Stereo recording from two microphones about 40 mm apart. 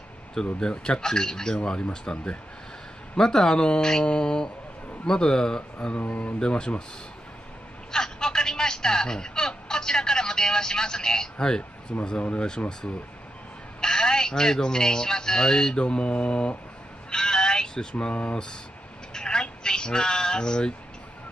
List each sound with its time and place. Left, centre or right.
0.6 s speech: left
3.2 s speech: centre
5.9 s speech: left
6.4 s speech: left
7.9 s telephone: centre
12.2 s a man's voice: left
17.1 s a sound: centre
18.1 s speech: left
19.1 s a sound: centre